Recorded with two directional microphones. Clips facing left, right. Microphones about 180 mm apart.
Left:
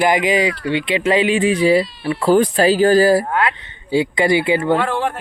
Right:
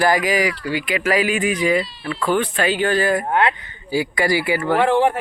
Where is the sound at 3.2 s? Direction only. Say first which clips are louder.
Right 1 dB; 25° right (ahead or behind).